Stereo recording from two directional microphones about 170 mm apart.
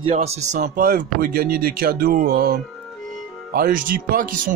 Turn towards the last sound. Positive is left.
turn(degrees=-55)  # may be behind; listen again after turning